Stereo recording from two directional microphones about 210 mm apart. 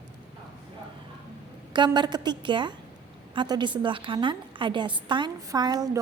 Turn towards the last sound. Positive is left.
turn(degrees=-20)  # may be behind; listen again after turning